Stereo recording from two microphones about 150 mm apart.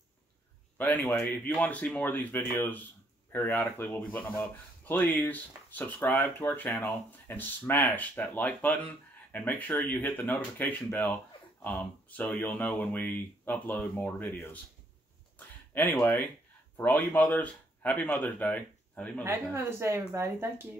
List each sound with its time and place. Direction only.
0.7 s speech: 10° left (ahead or behind)
15.9 s speech: 15° left (ahead or behind)
19.2 s speech: 15° right (ahead or behind)